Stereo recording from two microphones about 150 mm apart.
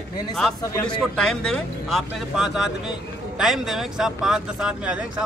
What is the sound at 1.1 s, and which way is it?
Speech, 5° left (ahead or behind).